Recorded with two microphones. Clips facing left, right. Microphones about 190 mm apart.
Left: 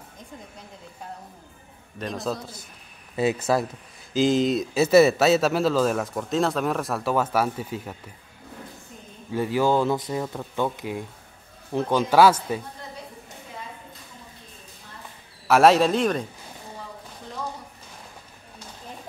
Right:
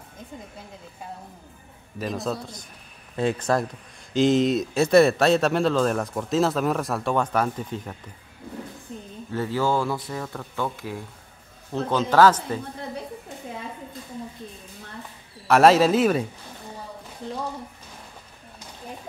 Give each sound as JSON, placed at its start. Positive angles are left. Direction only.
{"t": 2.0, "sound": "a man's voice", "side_deg": 0}
{"t": 9.3, "sound": "a man's voice", "side_deg": 15}
{"t": 15.4, "sound": "a man's voice", "side_deg": 0}